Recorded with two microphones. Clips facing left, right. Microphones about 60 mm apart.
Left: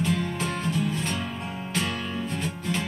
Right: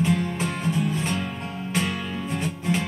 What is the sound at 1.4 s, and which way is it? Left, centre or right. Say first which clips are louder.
Music: right 1 dB; centre.